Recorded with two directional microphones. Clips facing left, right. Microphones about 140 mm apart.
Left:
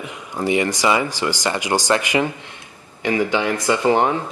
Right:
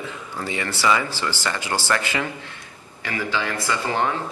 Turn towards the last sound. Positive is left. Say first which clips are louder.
# left 7 dB
turn(degrees=20)  # may be behind; listen again after turning